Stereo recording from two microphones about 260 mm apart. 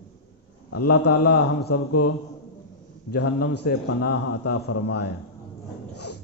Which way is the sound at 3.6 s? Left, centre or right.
Left.